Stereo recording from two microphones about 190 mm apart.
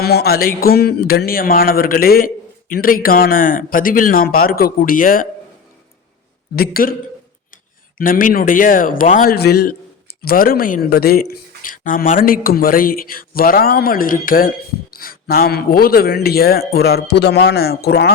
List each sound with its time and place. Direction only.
0.0 s a man's voice: 55° left (ahead or behind)
6.6 s a man's voice: 50° left (ahead or behind)
7.9 s a man's voice: 45° left (ahead or behind)